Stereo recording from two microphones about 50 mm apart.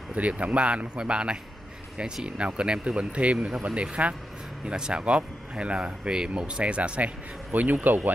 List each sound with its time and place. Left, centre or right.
0.1 s speech: right
7.5 s speech: right